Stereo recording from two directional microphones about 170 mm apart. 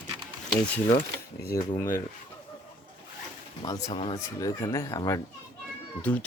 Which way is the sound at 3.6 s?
20° left (ahead or behind).